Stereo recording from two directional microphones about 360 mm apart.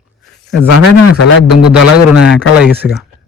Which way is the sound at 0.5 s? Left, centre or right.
Left.